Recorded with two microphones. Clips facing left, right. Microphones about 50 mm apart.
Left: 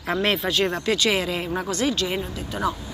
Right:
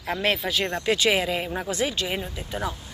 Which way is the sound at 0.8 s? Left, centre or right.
Centre.